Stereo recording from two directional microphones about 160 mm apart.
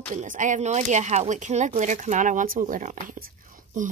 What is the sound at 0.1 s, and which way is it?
Speech, 50° right (ahead or behind).